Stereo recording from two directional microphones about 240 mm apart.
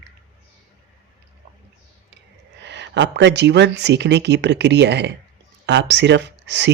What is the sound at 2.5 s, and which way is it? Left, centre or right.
Speech, right.